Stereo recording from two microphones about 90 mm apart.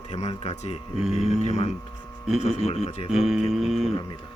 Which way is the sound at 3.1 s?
5° right (ahead or behind).